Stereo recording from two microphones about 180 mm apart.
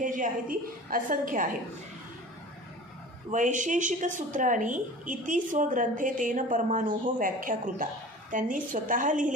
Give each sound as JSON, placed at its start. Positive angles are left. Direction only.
{"t": 0.0, "sound": "a woman's voice", "side_deg": -45}
{"t": 3.3, "sound": "a woman's voice", "side_deg": -45}